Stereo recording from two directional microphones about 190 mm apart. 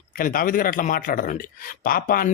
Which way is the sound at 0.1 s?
50° left (ahead or behind).